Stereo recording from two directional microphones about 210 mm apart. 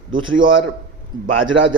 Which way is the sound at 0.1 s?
70° right (ahead or behind).